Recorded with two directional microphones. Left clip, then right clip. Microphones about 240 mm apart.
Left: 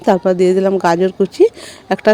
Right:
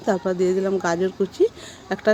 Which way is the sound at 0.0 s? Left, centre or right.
Left.